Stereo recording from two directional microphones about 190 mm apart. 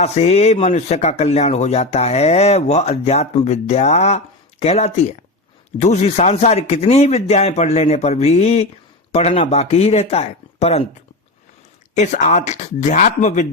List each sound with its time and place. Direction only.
0.0 s speech: 35° left (ahead or behind)
11.9 s speech: 40° left (ahead or behind)